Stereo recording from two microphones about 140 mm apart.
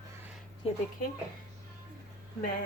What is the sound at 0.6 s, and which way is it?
Speech, 45° left (ahead or behind).